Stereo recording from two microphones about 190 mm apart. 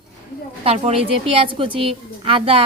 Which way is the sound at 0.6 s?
30° right (ahead or behind).